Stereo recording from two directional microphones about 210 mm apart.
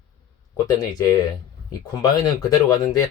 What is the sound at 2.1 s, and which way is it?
Speech, 20° left (ahead or behind).